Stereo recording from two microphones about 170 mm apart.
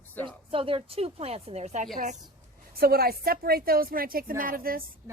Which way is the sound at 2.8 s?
65° right (ahead or behind).